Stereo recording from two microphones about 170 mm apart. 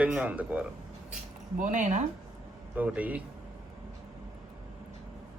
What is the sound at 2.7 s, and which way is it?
Speech, 10° right (ahead or behind).